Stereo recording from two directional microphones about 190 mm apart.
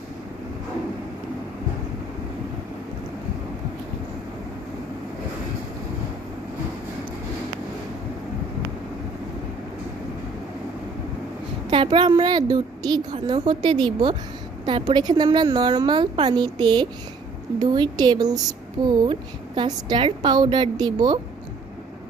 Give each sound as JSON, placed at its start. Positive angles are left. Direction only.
{"t": 11.7, "sound": "a woman's voice", "side_deg": -25}